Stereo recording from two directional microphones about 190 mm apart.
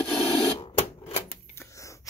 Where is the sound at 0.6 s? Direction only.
30° left (ahead or behind).